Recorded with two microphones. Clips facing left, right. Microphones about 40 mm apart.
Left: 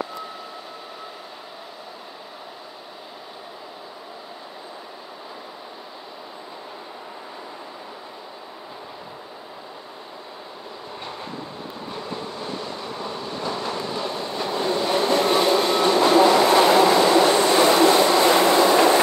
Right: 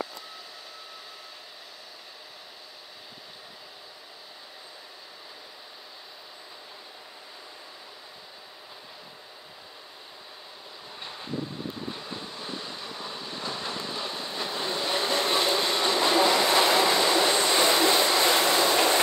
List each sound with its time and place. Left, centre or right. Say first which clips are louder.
12.3 s a sound: left 6 dB; left
14.0 s train: left 6 dB; left
14.8 s vehicle: left 6 dB; left
15.4 s train: left 7 dB; left
15.8 s train: left 7 dB; left